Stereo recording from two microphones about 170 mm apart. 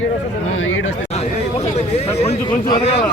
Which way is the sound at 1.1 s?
40° left (ahead or behind).